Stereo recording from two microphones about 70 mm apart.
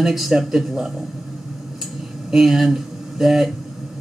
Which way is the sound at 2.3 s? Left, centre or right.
Centre.